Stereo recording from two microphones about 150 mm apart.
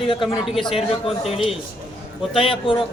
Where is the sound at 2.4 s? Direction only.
35° left (ahead or behind).